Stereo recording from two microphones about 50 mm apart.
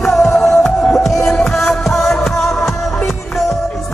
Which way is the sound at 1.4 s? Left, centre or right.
Centre.